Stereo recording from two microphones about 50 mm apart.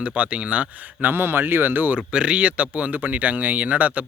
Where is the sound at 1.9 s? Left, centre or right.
Centre.